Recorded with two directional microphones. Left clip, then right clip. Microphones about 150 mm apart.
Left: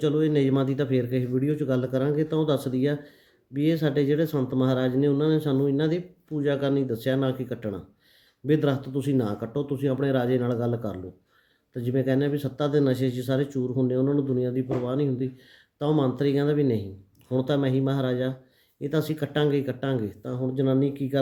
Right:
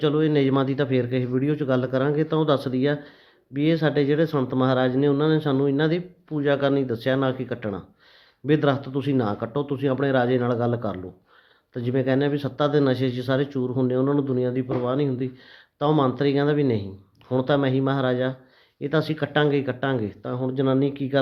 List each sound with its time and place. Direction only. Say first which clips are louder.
0.0 s speech: right 2 dB; 30° left (ahead or behind)